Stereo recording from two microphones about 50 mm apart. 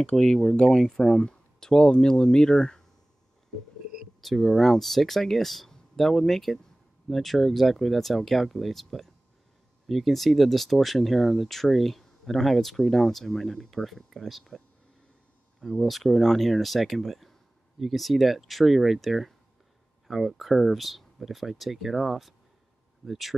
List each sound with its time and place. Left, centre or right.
0.1 s speech: centre
0.5 s speech: centre
4.2 s speech: centre
15.6 s speech: centre